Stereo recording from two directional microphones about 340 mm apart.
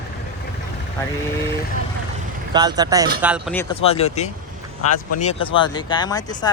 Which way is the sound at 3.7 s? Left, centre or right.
Centre.